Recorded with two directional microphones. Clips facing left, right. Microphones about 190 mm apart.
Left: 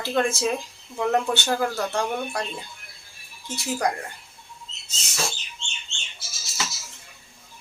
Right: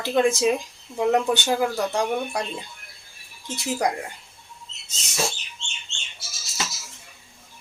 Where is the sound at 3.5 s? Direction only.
20° right (ahead or behind).